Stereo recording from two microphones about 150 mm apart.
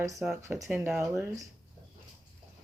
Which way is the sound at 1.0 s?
20° right (ahead or behind).